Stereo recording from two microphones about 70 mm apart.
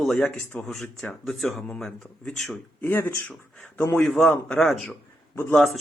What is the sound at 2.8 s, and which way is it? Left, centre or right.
Speech, left.